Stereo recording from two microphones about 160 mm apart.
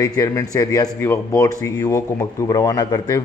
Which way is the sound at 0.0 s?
20° left (ahead or behind).